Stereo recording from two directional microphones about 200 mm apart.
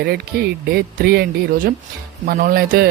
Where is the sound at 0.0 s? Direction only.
50° right (ahead or behind).